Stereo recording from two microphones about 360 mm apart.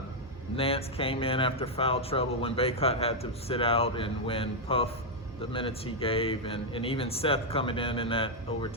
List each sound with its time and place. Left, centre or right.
0.5 s speech: centre